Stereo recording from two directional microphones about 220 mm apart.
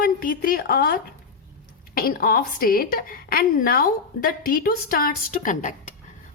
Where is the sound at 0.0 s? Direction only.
40° left (ahead or behind).